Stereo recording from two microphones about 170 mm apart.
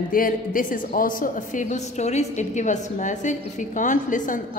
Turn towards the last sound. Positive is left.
turn(degrees=50)  # may be behind; listen again after turning